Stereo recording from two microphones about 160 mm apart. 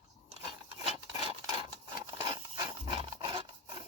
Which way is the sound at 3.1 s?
35° right (ahead or behind).